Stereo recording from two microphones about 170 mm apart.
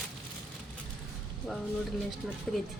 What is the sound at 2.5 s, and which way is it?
Speech, centre (ahead or behind).